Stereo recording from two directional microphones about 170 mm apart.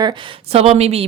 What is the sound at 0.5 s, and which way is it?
Speech, 35° right (ahead or behind).